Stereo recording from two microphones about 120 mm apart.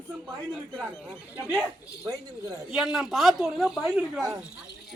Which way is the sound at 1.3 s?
15° right (ahead or behind).